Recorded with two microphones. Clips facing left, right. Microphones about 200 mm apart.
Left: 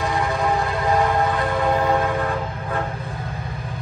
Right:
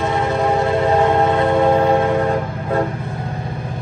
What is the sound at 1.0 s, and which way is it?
Music, 25° right (ahead or behind).